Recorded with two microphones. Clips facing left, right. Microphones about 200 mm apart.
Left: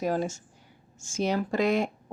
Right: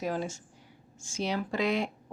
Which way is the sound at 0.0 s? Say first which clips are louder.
Left 4 dB; 45° left (ahead or behind).